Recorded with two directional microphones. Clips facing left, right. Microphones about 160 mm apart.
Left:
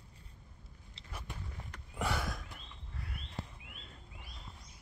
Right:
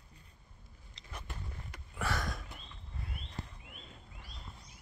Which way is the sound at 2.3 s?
Centre (ahead or behind).